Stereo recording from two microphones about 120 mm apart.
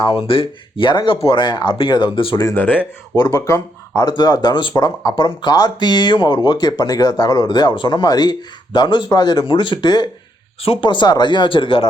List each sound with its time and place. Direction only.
0.3 s speech: 45° left (ahead or behind)
2.6 s speech: 15° left (ahead or behind)
3.2 s speech: 30° left (ahead or behind)
10.6 s speech: 50° left (ahead or behind)